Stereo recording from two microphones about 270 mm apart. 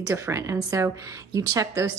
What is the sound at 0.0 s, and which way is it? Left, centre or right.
A woman's voice, centre.